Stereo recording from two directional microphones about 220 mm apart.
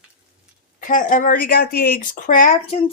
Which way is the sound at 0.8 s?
35° left (ahead or behind).